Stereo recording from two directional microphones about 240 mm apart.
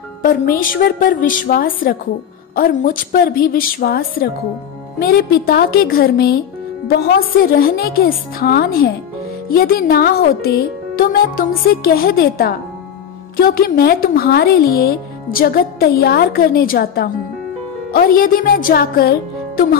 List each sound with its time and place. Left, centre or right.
0.2 s a woman's voice: left